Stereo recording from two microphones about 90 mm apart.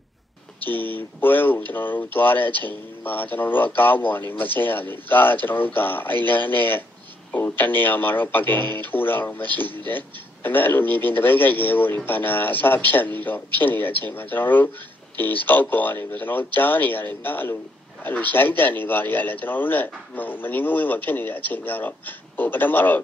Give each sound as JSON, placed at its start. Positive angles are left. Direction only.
{"t": 0.7, "sound": "a man's voice", "side_deg": 20}